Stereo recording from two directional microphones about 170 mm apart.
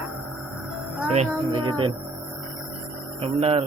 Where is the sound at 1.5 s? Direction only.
25° right (ahead or behind).